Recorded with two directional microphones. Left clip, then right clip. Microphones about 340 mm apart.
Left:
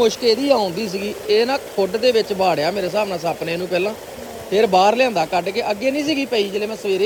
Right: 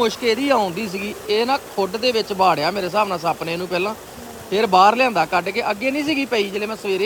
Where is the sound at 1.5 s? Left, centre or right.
Right.